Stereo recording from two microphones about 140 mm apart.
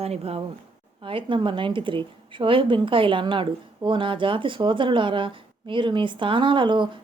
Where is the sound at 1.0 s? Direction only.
35° right (ahead or behind).